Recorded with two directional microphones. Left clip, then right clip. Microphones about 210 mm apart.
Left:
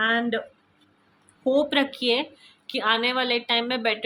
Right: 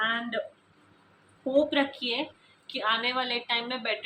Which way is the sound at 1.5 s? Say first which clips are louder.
Left 1 dB; 55° left (ahead or behind).